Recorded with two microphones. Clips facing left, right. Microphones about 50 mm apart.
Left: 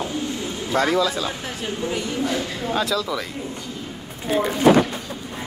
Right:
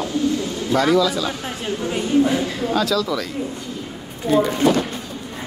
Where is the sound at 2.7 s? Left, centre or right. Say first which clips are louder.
Right 2 dB; left.